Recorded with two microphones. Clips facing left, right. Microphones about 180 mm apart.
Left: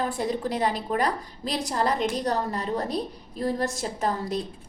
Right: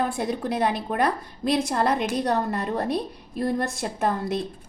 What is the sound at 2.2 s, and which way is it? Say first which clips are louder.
A woman's voice: right 2 dB; 60° right (ahead or behind).